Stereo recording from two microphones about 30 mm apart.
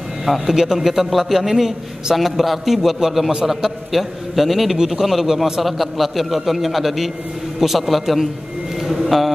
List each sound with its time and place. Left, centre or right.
0.2 s a man's voice: centre